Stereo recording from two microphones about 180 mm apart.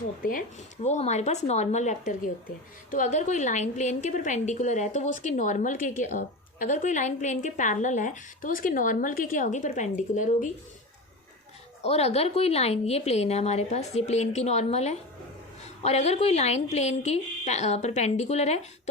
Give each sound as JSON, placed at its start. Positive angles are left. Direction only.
{"t": 0.2, "sound": "a woman's voice", "side_deg": 50}
{"t": 0.9, "sound": "a woman's voice", "side_deg": 40}
{"t": 11.8, "sound": "a woman's voice", "side_deg": 35}